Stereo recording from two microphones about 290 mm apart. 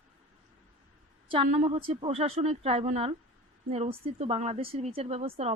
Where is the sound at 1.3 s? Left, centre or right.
Centre.